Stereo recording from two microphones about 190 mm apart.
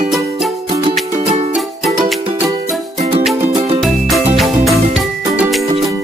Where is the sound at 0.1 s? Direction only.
Centre (ahead or behind).